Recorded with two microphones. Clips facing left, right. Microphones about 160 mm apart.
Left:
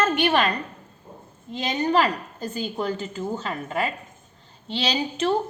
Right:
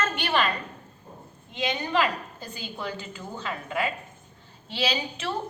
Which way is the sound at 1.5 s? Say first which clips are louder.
Left 4 dB; 45° left (ahead or behind).